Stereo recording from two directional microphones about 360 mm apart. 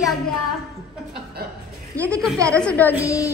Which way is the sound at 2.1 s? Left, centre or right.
Centre.